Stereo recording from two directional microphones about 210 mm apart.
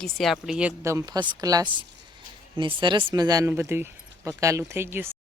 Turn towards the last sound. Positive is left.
turn(degrees=-10)  # may be behind; listen again after turning